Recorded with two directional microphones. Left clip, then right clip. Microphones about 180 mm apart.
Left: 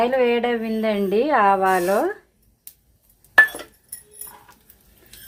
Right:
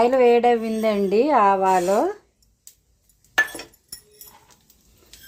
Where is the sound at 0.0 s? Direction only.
25° right (ahead or behind).